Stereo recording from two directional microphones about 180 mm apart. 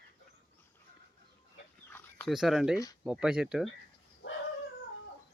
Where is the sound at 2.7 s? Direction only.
20° left (ahead or behind).